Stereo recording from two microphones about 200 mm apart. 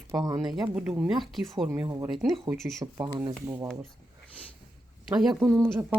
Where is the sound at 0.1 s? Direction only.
20° right (ahead or behind).